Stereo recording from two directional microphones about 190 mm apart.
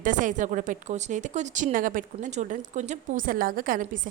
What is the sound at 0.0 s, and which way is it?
A woman's voice, 40° right (ahead or behind).